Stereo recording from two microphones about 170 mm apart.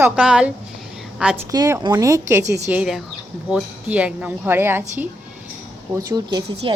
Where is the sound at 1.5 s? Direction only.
20° right (ahead or behind).